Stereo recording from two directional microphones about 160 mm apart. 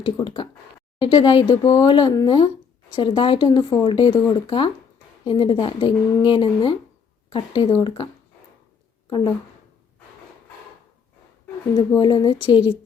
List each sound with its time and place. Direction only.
0.0 s speech: 30° left (ahead or behind)
9.0 s speech: 30° left (ahead or behind)
11.9 s speech: 30° left (ahead or behind)